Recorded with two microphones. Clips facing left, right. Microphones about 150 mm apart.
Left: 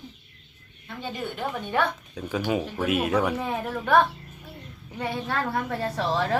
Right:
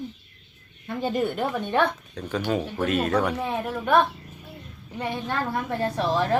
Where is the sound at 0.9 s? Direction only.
45° right (ahead or behind).